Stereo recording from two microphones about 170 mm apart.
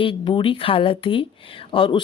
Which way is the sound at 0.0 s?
30° left (ahead or behind).